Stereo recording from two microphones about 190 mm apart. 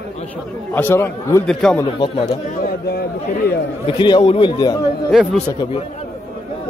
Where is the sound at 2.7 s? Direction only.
55° left (ahead or behind).